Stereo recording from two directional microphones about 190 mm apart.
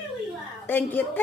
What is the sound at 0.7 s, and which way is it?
Speech, 10° left (ahead or behind).